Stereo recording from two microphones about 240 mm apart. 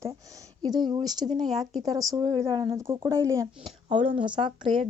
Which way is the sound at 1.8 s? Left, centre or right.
Centre.